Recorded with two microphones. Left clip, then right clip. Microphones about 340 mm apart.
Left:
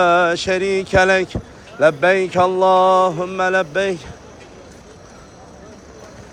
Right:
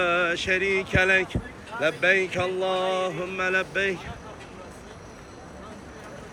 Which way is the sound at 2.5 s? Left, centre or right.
Left.